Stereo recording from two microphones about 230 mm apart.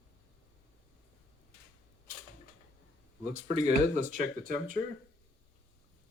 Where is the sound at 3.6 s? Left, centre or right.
Right.